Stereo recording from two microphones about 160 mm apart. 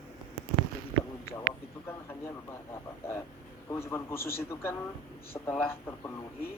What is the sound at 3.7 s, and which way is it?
A man's voice, 15° left (ahead or behind).